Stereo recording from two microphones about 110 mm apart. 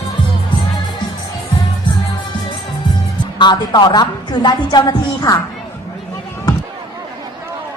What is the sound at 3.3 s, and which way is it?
A woman's voice, 40° left (ahead or behind).